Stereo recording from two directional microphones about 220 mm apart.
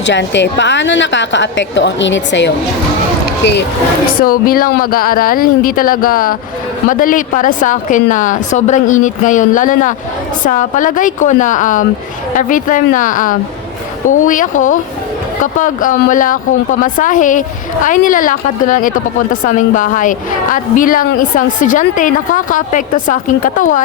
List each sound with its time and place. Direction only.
0.1 s a woman's voice: 50° left (ahead or behind)
4.2 s a woman's voice: 40° left (ahead or behind)